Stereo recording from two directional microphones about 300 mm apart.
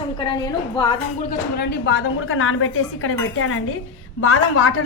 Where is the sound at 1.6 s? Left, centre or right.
Left.